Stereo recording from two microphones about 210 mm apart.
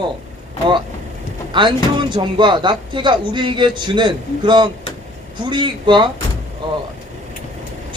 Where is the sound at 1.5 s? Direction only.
20° right (ahead or behind).